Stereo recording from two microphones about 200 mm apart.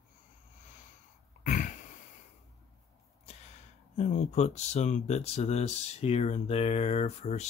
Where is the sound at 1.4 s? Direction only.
40° left (ahead or behind).